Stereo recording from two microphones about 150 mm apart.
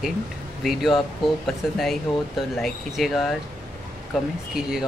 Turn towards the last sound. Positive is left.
turn(degrees=-5)  # may be behind; listen again after turning